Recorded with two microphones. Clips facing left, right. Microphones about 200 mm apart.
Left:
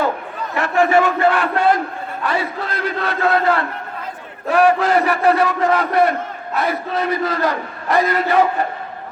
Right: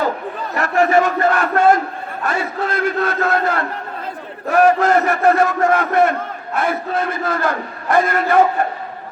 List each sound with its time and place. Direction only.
0.5 s crowd: 40° right (ahead or behind)
2.2 s a man's voice: 45° right (ahead or behind)